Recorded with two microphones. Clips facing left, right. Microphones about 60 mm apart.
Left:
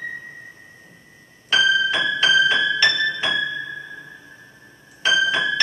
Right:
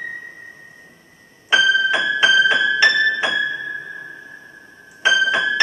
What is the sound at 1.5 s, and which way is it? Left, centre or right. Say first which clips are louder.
Music: right 3 dB; centre.